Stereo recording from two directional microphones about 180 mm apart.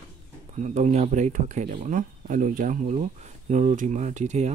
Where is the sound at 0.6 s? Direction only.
40° right (ahead or behind).